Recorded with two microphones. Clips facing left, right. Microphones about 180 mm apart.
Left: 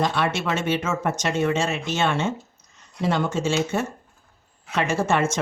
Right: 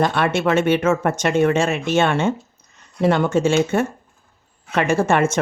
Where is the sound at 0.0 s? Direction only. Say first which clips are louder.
Right 5 dB; 55° right (ahead or behind).